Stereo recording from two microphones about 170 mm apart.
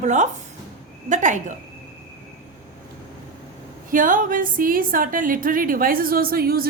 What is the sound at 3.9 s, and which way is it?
A woman's voice, 50° right (ahead or behind).